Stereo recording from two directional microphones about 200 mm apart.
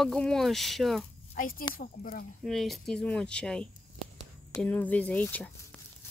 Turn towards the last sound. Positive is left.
turn(degrees=10)  # may be behind; listen again after turning